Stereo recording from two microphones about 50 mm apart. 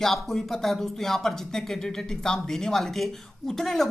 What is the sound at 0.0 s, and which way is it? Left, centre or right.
Speech, centre.